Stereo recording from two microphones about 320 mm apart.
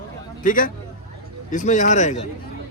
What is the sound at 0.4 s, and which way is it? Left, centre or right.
A man's voice, left.